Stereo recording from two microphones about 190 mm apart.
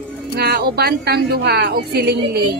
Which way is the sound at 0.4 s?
60° right (ahead or behind).